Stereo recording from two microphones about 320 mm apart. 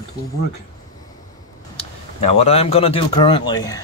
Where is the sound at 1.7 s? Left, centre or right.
Centre.